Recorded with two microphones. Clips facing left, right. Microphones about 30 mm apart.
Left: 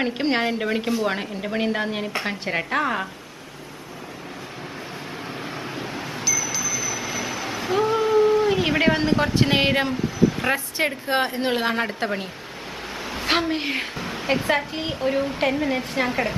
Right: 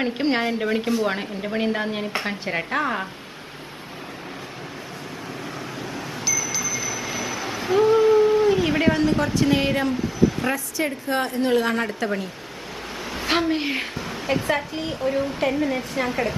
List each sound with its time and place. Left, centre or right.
0.0 s a woman's voice: centre
5.8 s a sound: centre
6.2 s a sound: centre
8.5 s speech: centre
11.1 s a woman's voice: left
13.0 s a woman's voice: centre; by 16.1 s left
16.1 s a woman's voice: centre